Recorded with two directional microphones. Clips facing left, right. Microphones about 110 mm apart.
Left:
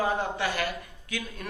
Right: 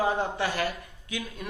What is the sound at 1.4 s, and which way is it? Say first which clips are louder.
Speech: right 3 dB; 15° right (ahead or behind).